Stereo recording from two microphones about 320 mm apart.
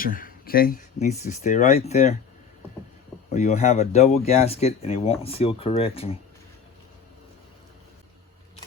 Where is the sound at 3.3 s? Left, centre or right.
Left.